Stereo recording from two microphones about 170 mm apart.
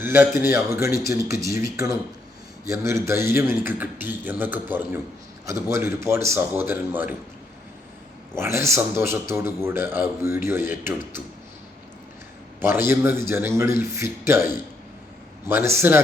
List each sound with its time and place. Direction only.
0.0 s a man's voice: 10° right (ahead or behind)
8.4 s a man's voice: 15° right (ahead or behind)
12.5 s a man's voice: 15° right (ahead or behind)